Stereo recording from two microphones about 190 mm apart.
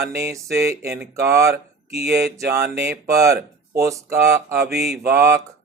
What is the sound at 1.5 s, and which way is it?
Speech, 55° right (ahead or behind).